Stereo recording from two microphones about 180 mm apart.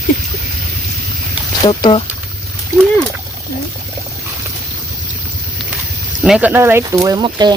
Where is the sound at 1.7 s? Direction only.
30° left (ahead or behind).